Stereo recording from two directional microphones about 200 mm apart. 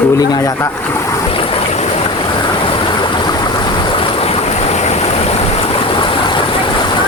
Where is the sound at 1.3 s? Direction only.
30° left (ahead or behind).